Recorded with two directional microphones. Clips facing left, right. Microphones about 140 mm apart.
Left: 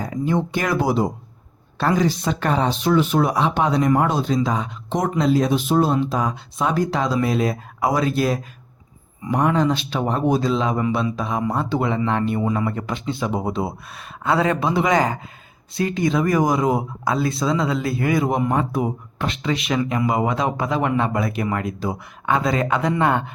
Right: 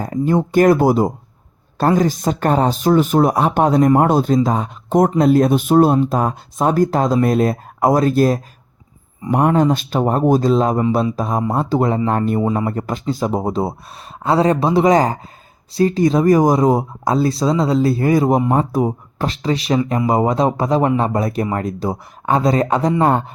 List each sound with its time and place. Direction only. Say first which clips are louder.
0.0 s speech: right 4 dB; 45° right (ahead or behind)
12.4 s speech: right 4 dB; 30° right (ahead or behind)
12.6 s speech: right 4 dB; 40° right (ahead or behind)